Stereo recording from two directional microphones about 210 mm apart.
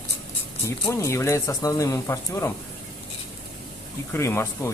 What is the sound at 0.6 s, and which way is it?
Speech, 15° left (ahead or behind).